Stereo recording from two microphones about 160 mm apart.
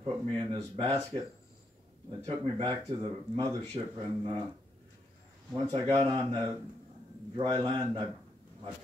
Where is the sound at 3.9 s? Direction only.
30° right (ahead or behind).